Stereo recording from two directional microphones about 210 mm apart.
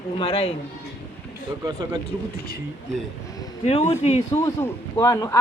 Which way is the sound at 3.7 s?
30° left (ahead or behind).